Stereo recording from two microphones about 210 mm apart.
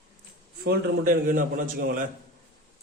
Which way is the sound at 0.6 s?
45° right (ahead or behind).